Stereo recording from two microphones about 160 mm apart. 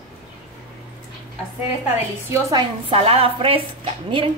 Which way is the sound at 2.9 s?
35° right (ahead or behind).